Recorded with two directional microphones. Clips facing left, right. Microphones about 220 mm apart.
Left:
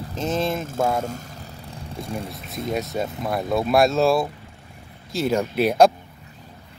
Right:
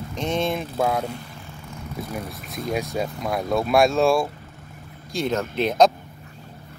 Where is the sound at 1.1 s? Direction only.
40° left (ahead or behind).